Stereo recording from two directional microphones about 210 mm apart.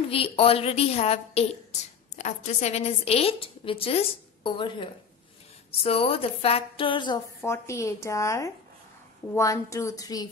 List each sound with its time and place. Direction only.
0.1 s a woman's voice: 25° left (ahead or behind)